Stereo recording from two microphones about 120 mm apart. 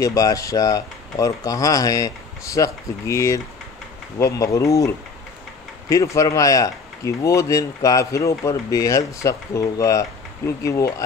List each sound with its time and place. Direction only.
0.0 s speech: 30° left (ahead or behind)